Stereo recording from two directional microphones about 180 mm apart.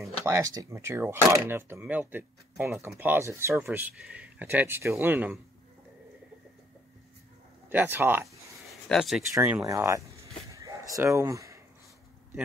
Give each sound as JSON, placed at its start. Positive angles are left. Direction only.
{"t": 0.0, "sound": "speech", "side_deg": -15}
{"t": 7.7, "sound": "speech", "side_deg": -10}
{"t": 8.8, "sound": "speech", "side_deg": 0}
{"t": 9.3, "sound": "speech", "side_deg": -15}
{"t": 9.7, "sound": "a sound", "side_deg": -15}